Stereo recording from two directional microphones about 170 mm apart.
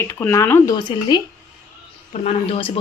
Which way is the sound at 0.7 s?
25° left (ahead or behind).